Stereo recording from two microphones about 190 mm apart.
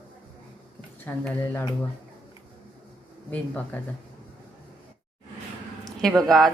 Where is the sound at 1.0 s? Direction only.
10° left (ahead or behind).